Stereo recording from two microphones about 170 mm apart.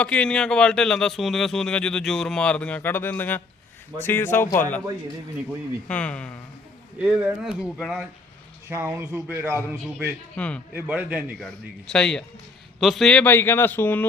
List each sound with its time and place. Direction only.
0.0 s speech: 5° left (ahead or behind)
5.9 s speech: 5° left (ahead or behind)
7.0 s speech: 10° right (ahead or behind)
10.3 s speech: 5° left (ahead or behind)
10.8 s speech: 10° right (ahead or behind)
11.3 s speech: 5° left (ahead or behind)